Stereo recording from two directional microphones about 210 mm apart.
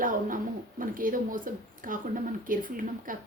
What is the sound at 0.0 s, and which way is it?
A woman's voice, 40° right (ahead or behind).